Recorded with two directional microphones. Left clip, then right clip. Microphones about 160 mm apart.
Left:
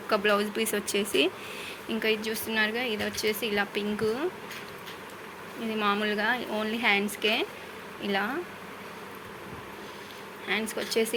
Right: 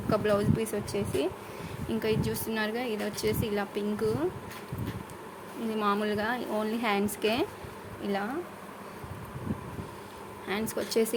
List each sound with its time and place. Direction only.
0.1 s speech: 15° right (ahead or behind)
0.6 s speech: centre (ahead or behind)
1.9 s speech: 25° right (ahead or behind)
5.7 s speech: 30° right (ahead or behind)
7.0 s speech: 35° right (ahead or behind)
8.0 s speech: 15° right (ahead or behind)
10.4 s speech: 30° right (ahead or behind)